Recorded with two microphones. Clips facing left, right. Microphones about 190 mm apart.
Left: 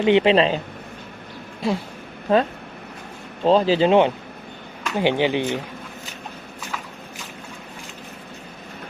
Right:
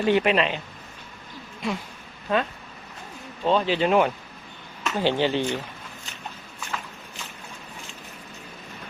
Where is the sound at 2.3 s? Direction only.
30° left (ahead or behind).